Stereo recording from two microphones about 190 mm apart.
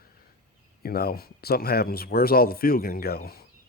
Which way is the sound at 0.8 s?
55° left (ahead or behind).